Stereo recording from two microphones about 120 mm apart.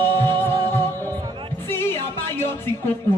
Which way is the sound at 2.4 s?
20° left (ahead or behind).